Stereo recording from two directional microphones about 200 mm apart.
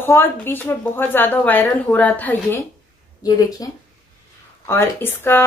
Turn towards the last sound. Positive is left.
turn(degrees=10)  # may be behind; listen again after turning